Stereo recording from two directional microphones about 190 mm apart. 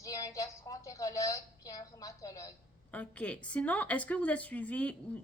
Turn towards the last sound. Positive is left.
turn(degrees=5)  # may be behind; listen again after turning